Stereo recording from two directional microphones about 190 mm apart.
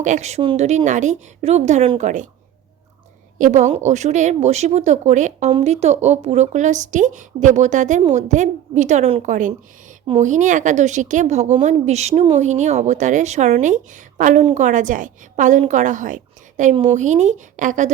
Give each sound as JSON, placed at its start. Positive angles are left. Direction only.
{"t": 0.0, "sound": "a woman's voice", "side_deg": -40}
{"t": 3.3, "sound": "a woman's voice", "side_deg": -40}